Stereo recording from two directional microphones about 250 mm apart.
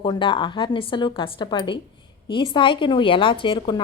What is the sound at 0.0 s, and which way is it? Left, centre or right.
A woman's voice, centre.